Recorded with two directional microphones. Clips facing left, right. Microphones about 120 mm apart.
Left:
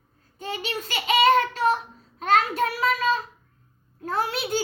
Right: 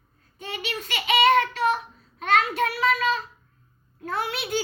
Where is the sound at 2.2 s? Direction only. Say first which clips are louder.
Left 1 dB; 35° left (ahead or behind).